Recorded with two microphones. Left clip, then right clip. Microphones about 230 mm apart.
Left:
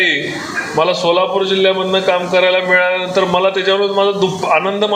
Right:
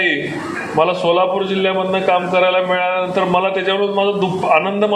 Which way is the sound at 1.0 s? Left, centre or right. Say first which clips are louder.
Left 1 dB; left.